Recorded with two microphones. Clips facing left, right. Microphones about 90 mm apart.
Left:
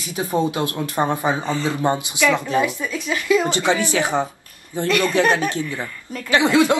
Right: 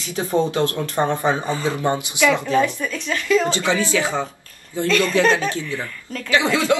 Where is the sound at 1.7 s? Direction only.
20° left (ahead or behind).